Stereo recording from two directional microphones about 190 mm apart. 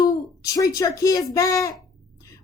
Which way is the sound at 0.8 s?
20° left (ahead or behind).